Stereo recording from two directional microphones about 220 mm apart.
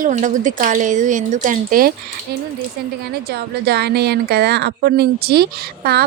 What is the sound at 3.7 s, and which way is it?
A woman's voice, 50° right (ahead or behind).